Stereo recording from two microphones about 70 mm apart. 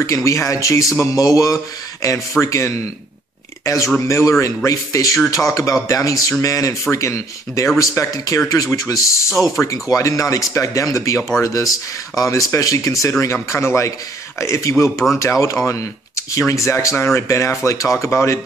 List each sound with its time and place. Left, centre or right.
0.0 s speech: left
8.5 s speech: left